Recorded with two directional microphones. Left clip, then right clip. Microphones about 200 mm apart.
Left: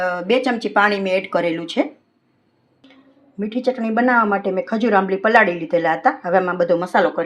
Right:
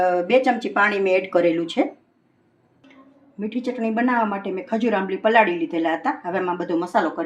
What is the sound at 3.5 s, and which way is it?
Speech, 40° left (ahead or behind).